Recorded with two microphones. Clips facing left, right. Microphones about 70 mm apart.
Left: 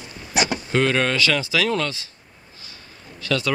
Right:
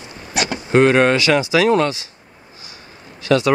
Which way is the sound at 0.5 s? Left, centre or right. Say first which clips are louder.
Right 10 dB; right.